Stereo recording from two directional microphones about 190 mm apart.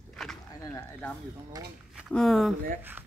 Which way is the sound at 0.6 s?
15° left (ahead or behind).